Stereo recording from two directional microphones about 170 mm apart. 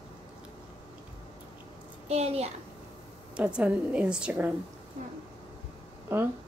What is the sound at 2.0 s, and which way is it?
Speech, 40° right (ahead or behind).